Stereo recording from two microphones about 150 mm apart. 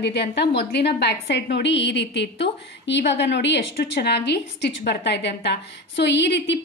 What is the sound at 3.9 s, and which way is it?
Speech, 90° left.